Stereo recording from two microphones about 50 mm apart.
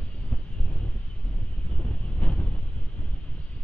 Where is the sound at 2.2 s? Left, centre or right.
Left.